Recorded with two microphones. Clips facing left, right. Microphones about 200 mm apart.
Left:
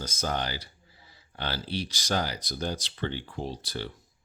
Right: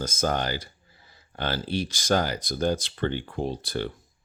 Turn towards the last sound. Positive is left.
turn(degrees=-55)  # may be behind; listen again after turning